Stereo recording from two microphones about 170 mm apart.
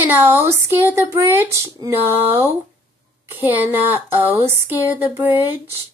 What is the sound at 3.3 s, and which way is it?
Speech, 10° right (ahead or behind).